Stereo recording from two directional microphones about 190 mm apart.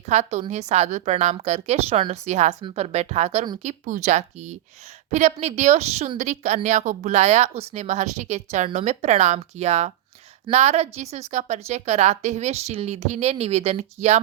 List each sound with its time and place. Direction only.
0.0 s a woman's voice: 35° right (ahead or behind)